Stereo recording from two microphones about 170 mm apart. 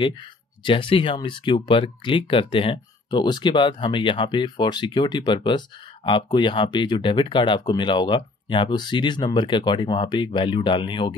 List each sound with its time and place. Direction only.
0.7 s speech: 30° left (ahead or behind)